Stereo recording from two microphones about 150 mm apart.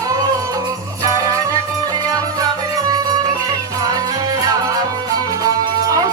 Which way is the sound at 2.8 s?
25° right (ahead or behind).